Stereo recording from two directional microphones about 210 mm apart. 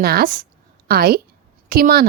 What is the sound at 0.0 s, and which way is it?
A woman's voice, 45° right (ahead or behind).